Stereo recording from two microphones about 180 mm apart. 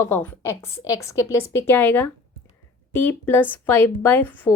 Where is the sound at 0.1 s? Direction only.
15° left (ahead or behind).